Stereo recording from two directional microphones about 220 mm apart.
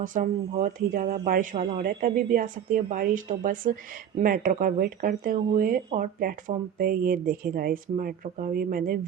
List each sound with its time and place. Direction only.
0.0 s speech: 35° right (ahead or behind)